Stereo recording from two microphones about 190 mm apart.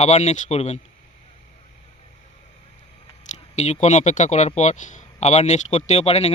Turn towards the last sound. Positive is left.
turn(degrees=35)  # may be behind; listen again after turning